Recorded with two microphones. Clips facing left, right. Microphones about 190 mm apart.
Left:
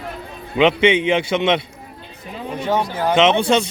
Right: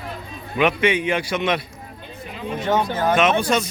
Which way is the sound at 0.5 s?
25° left (ahead or behind).